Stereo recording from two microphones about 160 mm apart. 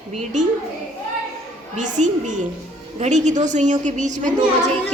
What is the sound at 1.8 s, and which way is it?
A woman's voice, 50° right (ahead or behind).